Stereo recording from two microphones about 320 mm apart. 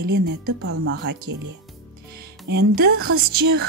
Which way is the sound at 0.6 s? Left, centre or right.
Right.